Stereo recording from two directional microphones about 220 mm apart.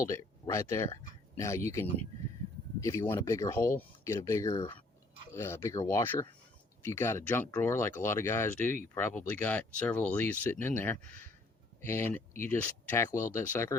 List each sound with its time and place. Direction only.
0.0 s speech: 15° left (ahead or behind)